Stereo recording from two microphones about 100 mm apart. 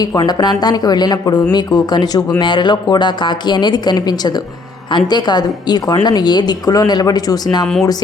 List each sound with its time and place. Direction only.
0.0 s a woman's voice: 40° left (ahead or behind)